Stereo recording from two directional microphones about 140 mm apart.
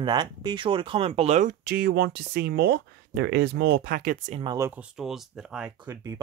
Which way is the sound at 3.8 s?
90° right.